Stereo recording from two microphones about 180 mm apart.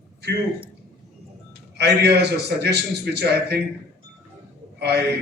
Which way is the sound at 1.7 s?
65° right (ahead or behind).